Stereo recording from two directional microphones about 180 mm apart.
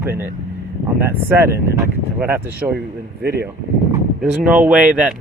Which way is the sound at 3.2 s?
65° right (ahead or behind).